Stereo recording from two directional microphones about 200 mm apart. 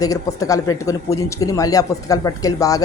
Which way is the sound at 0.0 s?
15° left (ahead or behind).